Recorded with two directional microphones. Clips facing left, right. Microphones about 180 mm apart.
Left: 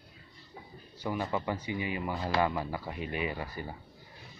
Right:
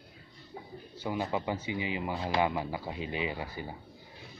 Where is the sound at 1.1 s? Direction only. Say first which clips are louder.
Even; 15° right (ahead or behind).